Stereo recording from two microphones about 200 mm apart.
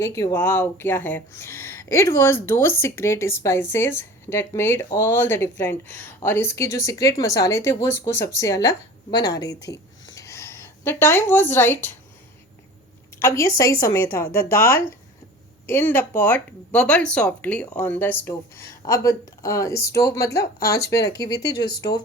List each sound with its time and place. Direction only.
0.0 s speech: 15° left (ahead or behind)
10.2 s a sound: 15° left (ahead or behind)
13.1 s speech: 15° left (ahead or behind)